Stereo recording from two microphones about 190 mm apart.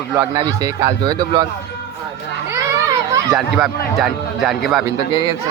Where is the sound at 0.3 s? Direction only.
20° right (ahead or behind).